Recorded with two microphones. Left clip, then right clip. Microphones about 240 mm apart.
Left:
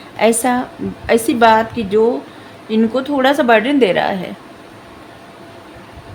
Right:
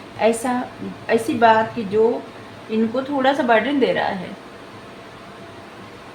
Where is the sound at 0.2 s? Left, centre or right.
Left.